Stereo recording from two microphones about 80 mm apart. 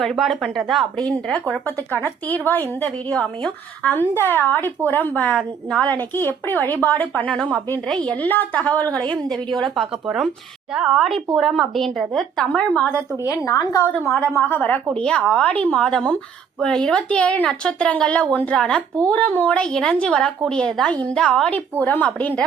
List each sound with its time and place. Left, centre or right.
0.0 s speech: centre
2.2 s a woman's voice: left
7.9 s speech: centre
8.1 s a woman's voice: left
9.1 s speech: centre
12.5 s speech: centre
13.2 s a woman's voice: left
14.1 s a woman's voice: left